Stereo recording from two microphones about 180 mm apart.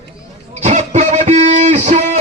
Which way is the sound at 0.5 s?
40° right (ahead or behind).